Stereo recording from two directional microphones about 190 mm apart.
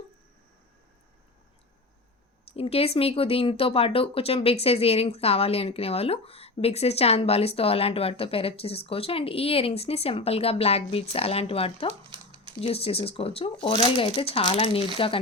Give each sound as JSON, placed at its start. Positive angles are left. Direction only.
{"t": 2.5, "sound": "speech", "side_deg": 30}
{"t": 12.1, "sound": "a sound", "side_deg": -25}
{"t": 12.6, "sound": "speech", "side_deg": 30}